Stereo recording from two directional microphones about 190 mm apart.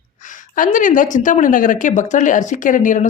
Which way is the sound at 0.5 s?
45° left (ahead or behind).